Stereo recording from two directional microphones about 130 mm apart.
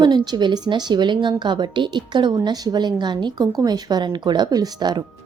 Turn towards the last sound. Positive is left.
turn(degrees=-35)  # may be behind; listen again after turning